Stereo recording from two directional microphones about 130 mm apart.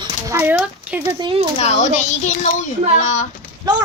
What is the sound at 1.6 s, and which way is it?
Speech, 65° left (ahead or behind).